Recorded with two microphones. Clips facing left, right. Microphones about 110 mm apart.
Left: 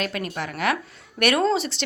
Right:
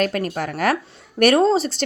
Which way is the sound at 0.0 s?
45° right (ahead or behind).